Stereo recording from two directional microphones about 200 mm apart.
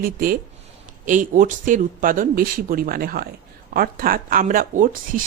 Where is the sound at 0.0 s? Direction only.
45° right (ahead or behind).